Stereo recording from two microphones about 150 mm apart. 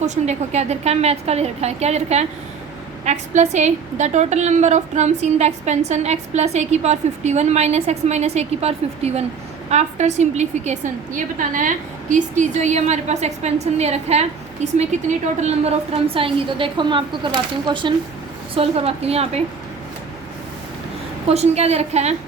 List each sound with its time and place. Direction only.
0.0 s a woman's voice: 50° right (ahead or behind); by 17.9 s 30° right (ahead or behind)
18.5 s a woman's voice: 40° right (ahead or behind)
21.2 s a woman's voice: 45° right (ahead or behind)